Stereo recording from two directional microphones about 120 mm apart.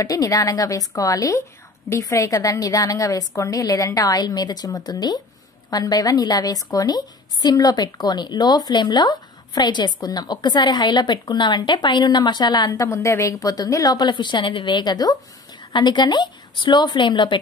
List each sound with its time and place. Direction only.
0.0 s a woman's voice: 30° left (ahead or behind)